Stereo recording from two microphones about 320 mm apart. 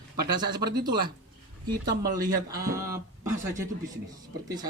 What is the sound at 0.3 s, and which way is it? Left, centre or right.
A man's voice, centre.